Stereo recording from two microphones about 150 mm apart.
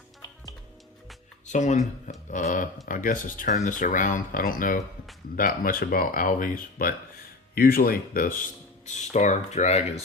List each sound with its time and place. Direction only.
1.5 s speech: 50° left (ahead or behind); by 6.9 s 70° left (ahead or behind)
7.5 s speech: 80° left
8.9 s speech: 55° left (ahead or behind)